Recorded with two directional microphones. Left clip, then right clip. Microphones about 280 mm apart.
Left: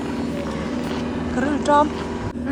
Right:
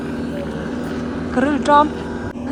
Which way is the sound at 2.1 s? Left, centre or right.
Centre.